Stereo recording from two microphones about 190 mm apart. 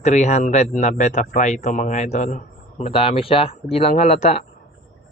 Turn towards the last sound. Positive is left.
turn(degrees=35)  # may be behind; listen again after turning